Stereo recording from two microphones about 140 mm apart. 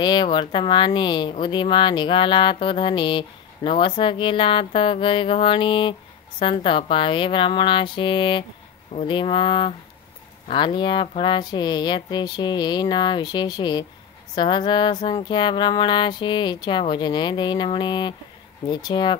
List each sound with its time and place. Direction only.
0.0 s speech: 30° left (ahead or behind)